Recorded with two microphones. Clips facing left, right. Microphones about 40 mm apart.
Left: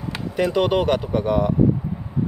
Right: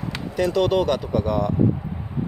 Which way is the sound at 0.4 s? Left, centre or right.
Left.